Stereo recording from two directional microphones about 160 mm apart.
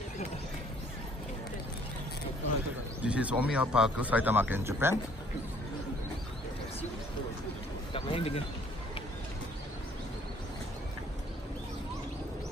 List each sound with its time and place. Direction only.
3.0 s speech: 10° right (ahead or behind)
7.9 s speech: 35° left (ahead or behind)